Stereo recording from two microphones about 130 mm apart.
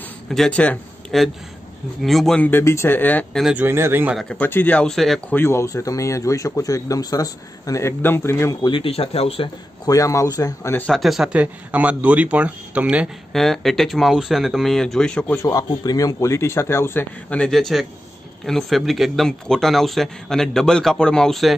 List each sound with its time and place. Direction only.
0.3 s speech: 5° left (ahead or behind)
3.5 s speech: 20° right (ahead or behind)
4.1 s speech: centre (ahead or behind)
4.4 s speech: 15° left (ahead or behind)
5.3 s speech: 20° left (ahead or behind)
8.6 s speech: 45° left (ahead or behind)
9.8 s speech: 25° left (ahead or behind)
10.9 s speech: centre (ahead or behind)
13.3 s speech: centre (ahead or behind)
15.4 s speech: 30° left (ahead or behind); by 21.5 s centre (ahead or behind)